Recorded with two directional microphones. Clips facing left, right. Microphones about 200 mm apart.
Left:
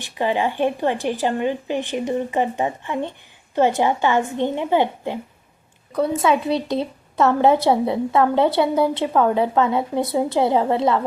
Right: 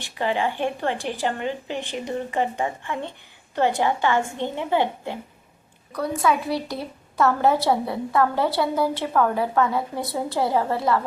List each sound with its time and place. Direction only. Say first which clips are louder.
0.1 s a woman's voice: left 3 dB; 15° left (ahead or behind)